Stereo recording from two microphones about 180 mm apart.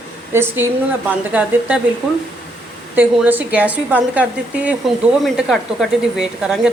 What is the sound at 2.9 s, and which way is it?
A woman's voice, 10° right (ahead or behind).